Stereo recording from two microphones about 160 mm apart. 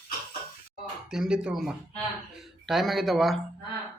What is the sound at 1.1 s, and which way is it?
Speech, 5° right (ahead or behind).